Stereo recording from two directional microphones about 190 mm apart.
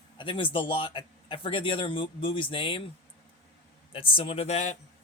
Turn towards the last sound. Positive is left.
turn(degrees=35)  # may be behind; listen again after turning